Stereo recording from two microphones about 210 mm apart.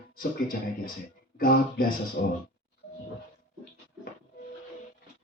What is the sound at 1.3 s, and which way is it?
Speech, 45° left (ahead or behind).